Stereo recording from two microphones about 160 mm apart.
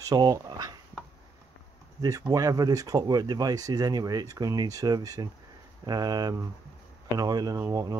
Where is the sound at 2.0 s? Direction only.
20° right (ahead or behind).